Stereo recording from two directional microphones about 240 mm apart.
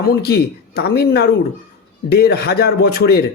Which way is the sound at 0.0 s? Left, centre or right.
Left.